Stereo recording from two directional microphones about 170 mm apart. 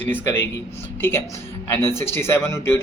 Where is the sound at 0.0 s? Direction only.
10° left (ahead or behind).